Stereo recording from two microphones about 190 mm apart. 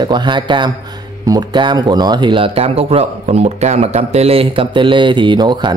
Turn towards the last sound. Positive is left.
turn(degrees=-25)  # may be behind; listen again after turning